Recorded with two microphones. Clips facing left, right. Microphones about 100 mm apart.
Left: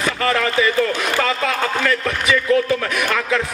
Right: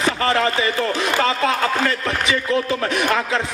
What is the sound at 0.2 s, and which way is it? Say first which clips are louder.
Speech: left 4 dB; 30° right (ahead or behind).